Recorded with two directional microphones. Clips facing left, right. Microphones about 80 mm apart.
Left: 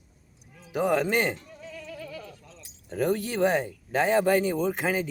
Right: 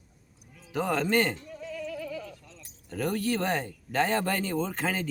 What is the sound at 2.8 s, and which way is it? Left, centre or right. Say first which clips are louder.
Speech: left 2 dB; centre.